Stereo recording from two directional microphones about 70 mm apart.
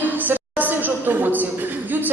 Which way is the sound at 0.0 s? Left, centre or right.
Right.